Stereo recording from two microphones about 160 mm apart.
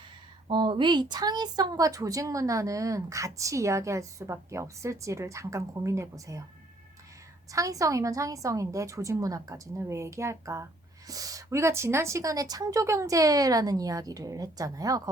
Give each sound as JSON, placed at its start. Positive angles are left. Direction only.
{"t": 0.4, "sound": "a woman's voice", "side_deg": -30}
{"t": 7.5, "sound": "a woman's voice", "side_deg": -20}